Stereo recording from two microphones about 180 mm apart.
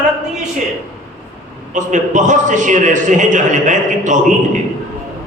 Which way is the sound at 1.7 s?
45° right (ahead or behind).